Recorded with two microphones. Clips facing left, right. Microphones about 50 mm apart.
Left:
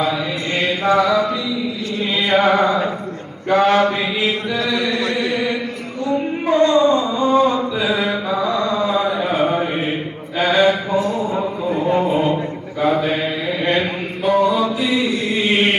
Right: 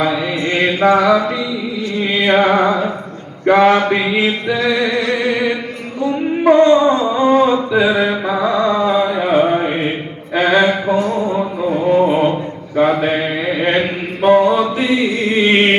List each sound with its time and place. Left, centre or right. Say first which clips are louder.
0.5 s mantra: right 3 dB; right
3.4 s mantra: right 5 dB; right
3.7 s mantra: right 2 dB; right
6.5 s mantra: right 4 dB; right
7.2 s a sound: right 4 dB; right
7.5 s mantra: right 6 dB; right
7.9 s mantra: right 4 dB; right
9.1 s a sound: right 5 dB; right
10.4 s mantra: right 2 dB; right
10.9 s a sound: right 2 dB; right
11.7 s a sound: right 4 dB; right
12.7 s mantra: right 4 dB; right